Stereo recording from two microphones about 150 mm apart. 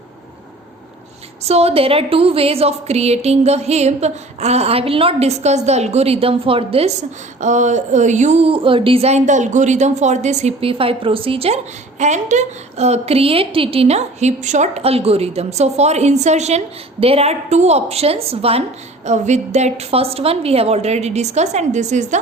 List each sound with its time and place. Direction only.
1.5 s speech: 45° right (ahead or behind)
7.4 s speech: 55° right (ahead or behind)